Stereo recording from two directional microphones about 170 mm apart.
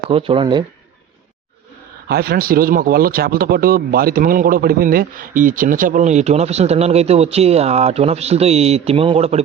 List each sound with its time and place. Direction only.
0.1 s speech: 35° right (ahead or behind)
2.0 s speech: 65° right (ahead or behind); by 9.4 s 35° right (ahead or behind)